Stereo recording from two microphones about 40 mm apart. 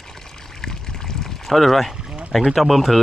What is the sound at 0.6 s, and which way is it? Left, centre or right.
Pour, centre.